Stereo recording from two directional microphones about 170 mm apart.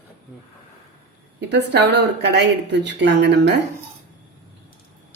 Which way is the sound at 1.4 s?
90° right.